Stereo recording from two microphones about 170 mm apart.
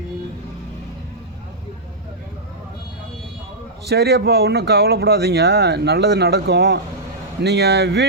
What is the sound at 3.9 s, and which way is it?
Speech, 80° right.